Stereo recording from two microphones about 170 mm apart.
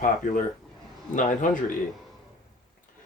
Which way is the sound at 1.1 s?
50° left (ahead or behind).